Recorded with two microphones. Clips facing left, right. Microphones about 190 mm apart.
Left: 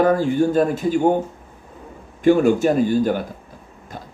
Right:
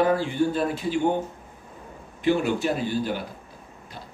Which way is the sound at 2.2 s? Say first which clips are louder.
Left 8 dB; 45° left (ahead or behind).